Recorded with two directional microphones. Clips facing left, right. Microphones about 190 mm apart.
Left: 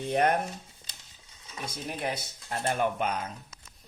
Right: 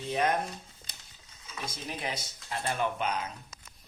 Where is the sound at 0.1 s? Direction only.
60° left (ahead or behind).